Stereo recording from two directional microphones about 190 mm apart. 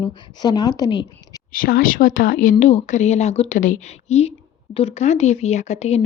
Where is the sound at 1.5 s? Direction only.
50° left (ahead or behind).